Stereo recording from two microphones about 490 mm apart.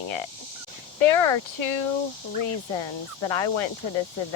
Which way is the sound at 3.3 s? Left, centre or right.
Left.